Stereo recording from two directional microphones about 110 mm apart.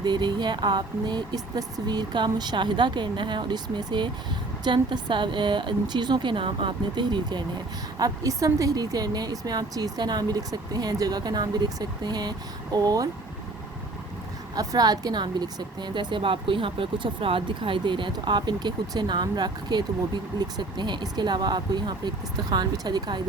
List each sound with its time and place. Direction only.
0.0 s a woman's voice: 40° right (ahead or behind)
14.5 s a woman's voice: 35° right (ahead or behind)